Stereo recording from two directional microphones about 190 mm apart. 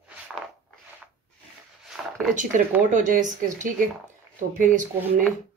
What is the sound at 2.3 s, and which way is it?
Speech, 40° right (ahead or behind).